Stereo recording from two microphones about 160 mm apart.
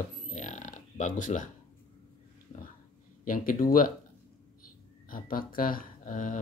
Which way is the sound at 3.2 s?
60° left (ahead or behind).